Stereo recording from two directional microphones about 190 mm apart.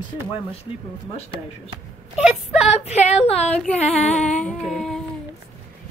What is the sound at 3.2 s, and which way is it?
Female singing, 35° left (ahead or behind).